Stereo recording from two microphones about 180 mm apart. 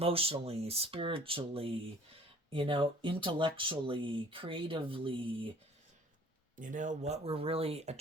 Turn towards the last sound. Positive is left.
turn(degrees=-35)  # may be behind; listen again after turning